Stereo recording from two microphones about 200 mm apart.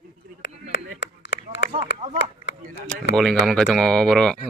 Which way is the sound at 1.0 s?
60° left (ahead or behind).